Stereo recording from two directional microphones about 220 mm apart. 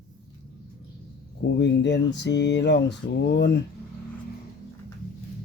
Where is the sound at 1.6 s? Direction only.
50° left (ahead or behind).